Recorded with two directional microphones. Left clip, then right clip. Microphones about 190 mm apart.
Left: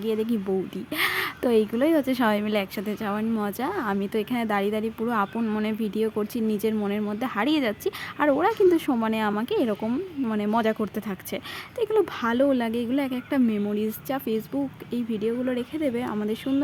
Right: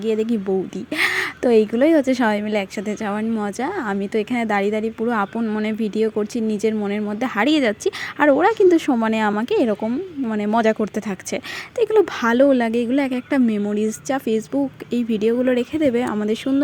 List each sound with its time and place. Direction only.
0.0 s a woman's voice: 20° right (ahead or behind)
9.8 s a woman's voice: 15° right (ahead or behind)